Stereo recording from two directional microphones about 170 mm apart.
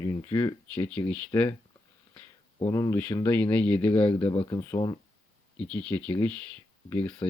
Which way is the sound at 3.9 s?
35° left (ahead or behind).